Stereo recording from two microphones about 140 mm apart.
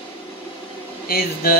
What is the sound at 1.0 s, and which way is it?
Speech, 90° left.